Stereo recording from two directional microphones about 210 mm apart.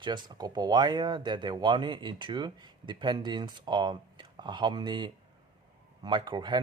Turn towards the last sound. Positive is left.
turn(degrees=-20)  # may be behind; listen again after turning